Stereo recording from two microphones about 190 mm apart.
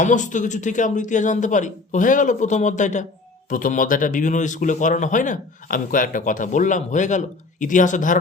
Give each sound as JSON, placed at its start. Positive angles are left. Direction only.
{"t": 0.0, "sound": "speech", "side_deg": 40}